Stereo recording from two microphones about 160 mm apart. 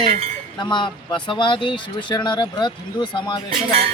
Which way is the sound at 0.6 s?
30° left (ahead or behind).